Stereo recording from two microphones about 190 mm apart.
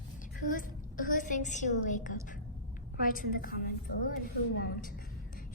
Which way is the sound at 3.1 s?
50° left (ahead or behind).